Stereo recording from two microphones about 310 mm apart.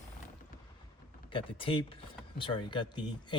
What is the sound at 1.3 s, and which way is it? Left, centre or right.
Speech, centre.